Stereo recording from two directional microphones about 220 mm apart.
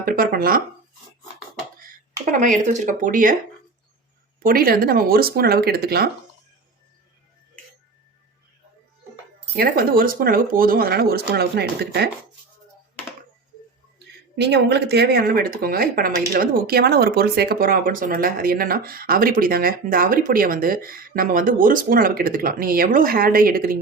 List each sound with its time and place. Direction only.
0.0 s speech: 40° right (ahead or behind)
2.3 s speech: 35° right (ahead or behind)
4.4 s speech: 40° right (ahead or behind)
9.6 s speech: 40° right (ahead or behind)
14.3 s speech: 50° right (ahead or behind)